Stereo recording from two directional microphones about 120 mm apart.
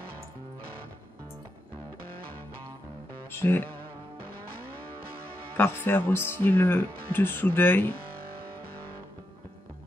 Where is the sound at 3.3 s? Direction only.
20° left (ahead or behind).